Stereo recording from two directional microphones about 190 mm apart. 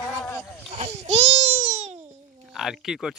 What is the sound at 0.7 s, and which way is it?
Baby cry, 35° right (ahead or behind).